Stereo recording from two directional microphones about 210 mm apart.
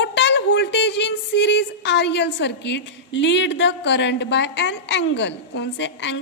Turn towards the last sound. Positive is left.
turn(degrees=60)  # may be behind; listen again after turning